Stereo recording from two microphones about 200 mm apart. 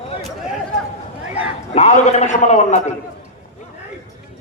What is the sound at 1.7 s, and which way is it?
A man's voice, 35° left (ahead or behind).